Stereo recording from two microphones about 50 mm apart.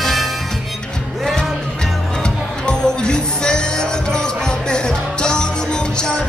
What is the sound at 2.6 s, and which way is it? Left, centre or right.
Music, centre.